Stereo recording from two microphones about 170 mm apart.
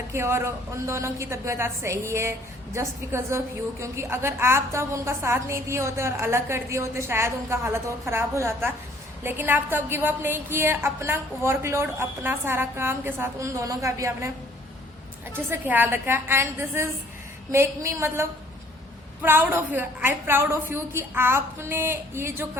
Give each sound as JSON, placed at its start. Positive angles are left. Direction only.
{"t": 0.1, "sound": "a woman's voice", "side_deg": -15}
{"t": 15.3, "sound": "a woman's voice", "side_deg": -10}